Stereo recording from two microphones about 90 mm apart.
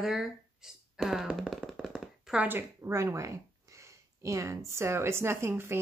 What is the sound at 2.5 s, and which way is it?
Speech, 25° right (ahead or behind).